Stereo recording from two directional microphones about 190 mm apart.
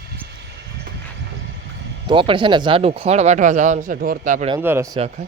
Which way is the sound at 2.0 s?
25° right (ahead or behind).